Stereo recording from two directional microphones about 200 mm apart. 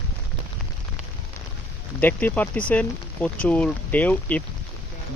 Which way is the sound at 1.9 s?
10° left (ahead or behind).